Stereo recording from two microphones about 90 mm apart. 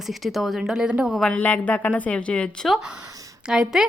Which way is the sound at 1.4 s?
15° left (ahead or behind).